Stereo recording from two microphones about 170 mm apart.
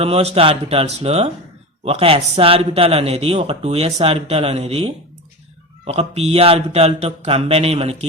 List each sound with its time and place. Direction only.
0.0 s a man's voice: 35° right (ahead or behind)